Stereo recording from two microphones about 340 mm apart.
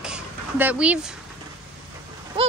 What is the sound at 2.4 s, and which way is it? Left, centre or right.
Speech, centre.